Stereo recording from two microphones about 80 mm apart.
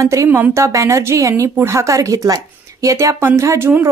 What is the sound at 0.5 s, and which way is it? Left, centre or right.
A woman's voice, right.